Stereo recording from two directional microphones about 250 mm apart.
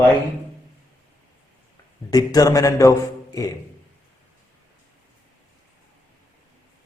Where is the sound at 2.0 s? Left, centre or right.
Centre.